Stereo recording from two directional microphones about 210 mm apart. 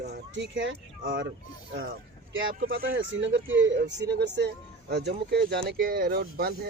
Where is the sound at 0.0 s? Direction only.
55° right (ahead or behind).